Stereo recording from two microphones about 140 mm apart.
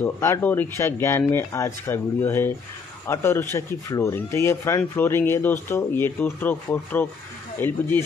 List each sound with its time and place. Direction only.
0.0 s speech: 15° left (ahead or behind)